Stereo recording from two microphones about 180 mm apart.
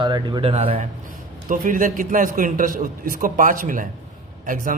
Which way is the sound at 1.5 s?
50° right (ahead or behind).